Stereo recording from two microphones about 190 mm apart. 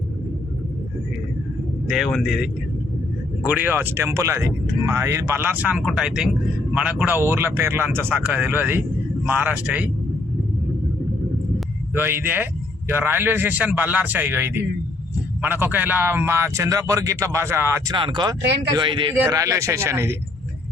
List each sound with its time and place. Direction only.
1.9 s speech: centre (ahead or behind)
11.9 s speech: 10° right (ahead or behind)
17.9 s speech: 25° right (ahead or behind)